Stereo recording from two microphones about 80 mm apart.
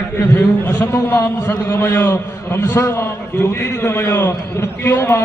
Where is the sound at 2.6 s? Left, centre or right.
Left.